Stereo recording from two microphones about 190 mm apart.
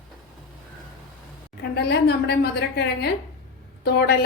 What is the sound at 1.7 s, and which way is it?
A woman's voice, 60° left (ahead or behind).